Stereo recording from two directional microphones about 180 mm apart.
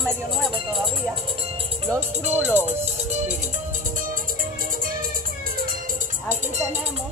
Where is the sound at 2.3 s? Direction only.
10° right (ahead or behind).